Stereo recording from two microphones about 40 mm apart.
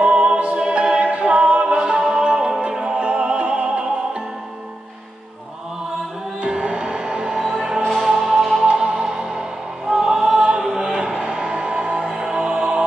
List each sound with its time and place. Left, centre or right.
0.0 s music: right
0.9 s music: right
6.4 s music: right
7.3 s music: centre
8.6 s music: right
9.8 s choir: centre
12.2 s music: right